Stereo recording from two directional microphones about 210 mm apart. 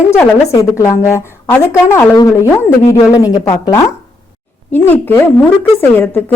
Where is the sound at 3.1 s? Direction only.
15° left (ahead or behind).